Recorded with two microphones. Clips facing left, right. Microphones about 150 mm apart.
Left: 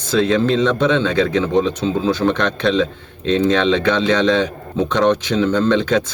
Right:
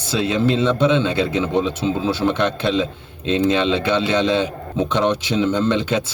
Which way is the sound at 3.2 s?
10° right (ahead or behind).